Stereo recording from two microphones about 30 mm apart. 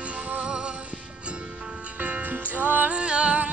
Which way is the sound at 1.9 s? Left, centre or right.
Right.